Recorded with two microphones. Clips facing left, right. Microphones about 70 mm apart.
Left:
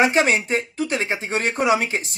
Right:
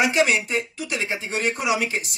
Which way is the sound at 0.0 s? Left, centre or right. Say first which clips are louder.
Left 2 dB; left.